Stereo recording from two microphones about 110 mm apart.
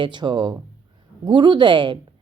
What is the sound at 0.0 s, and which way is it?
Speech, 45° right (ahead or behind).